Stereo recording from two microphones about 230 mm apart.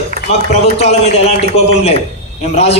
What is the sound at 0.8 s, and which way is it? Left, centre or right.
Speech, left.